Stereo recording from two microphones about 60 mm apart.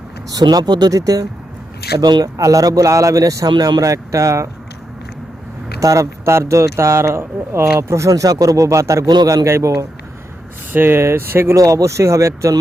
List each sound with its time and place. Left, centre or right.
0.3 s speech: right
5.8 s speech: right
10.7 s speech: right
11.5 s speech: right